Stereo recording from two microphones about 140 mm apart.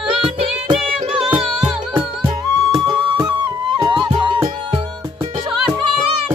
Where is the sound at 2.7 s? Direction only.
35° right (ahead or behind).